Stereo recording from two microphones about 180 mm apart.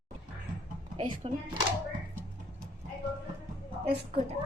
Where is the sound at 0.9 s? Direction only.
30° right (ahead or behind).